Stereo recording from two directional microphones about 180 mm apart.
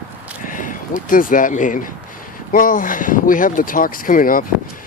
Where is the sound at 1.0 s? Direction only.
50° left (ahead or behind).